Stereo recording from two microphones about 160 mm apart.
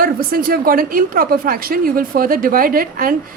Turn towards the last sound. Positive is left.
turn(degrees=-65)  # may be behind; listen again after turning